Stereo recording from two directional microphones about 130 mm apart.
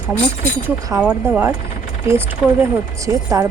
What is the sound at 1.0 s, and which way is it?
Speech, 15° right (ahead or behind).